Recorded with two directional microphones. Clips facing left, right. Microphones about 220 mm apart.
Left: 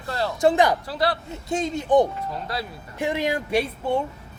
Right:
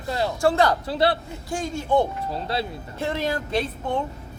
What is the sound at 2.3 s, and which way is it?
Speech, 25° right (ahead or behind).